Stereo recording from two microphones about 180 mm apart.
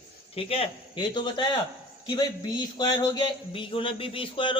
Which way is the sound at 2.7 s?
25° left (ahead or behind).